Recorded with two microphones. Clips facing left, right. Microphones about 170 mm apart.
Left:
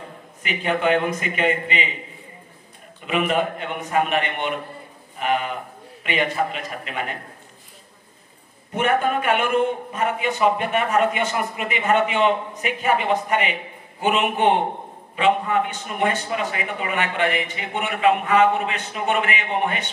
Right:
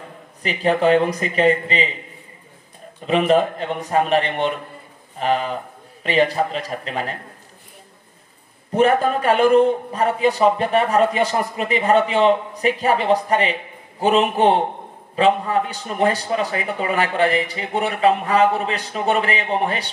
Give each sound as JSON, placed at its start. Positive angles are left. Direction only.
{"t": 0.4, "sound": "a man's voice", "side_deg": -35}
{"t": 3.1, "sound": "a man's voice", "side_deg": -35}
{"t": 8.7, "sound": "a man's voice", "side_deg": -35}